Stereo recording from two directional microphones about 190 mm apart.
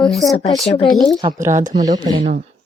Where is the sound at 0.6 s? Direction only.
30° left (ahead or behind).